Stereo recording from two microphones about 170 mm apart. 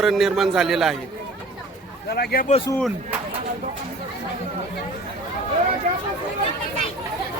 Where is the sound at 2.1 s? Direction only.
65° left (ahead or behind).